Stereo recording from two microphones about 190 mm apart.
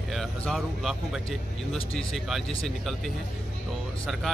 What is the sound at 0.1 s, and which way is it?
Speech, centre (ahead or behind).